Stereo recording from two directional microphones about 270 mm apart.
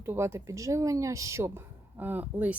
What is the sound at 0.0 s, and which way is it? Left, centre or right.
Speech, centre.